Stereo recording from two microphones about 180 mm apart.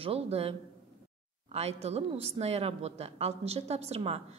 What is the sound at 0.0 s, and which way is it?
A woman's voice, 35° right (ahead or behind).